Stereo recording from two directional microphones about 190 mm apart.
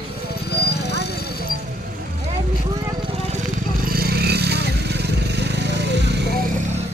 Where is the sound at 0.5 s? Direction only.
60° left (ahead or behind).